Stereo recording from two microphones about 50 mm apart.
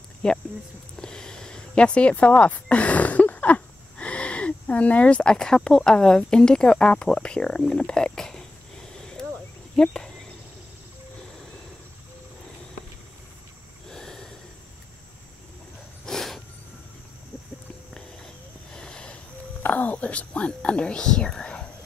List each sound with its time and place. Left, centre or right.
0.2 s speech: centre
9.8 s speech: centre
13.9 s snort: centre
16.1 s a sound: centre
17.9 s a sound: centre
19.6 s speech: left; by 21.6 s centre